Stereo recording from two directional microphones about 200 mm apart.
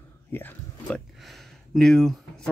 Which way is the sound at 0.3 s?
10° left (ahead or behind).